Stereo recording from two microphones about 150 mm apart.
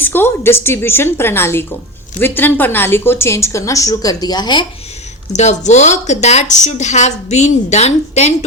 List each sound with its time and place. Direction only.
0.0 s a woman's voice: 15° left (ahead or behind)
5.3 s speech: 50° left (ahead or behind)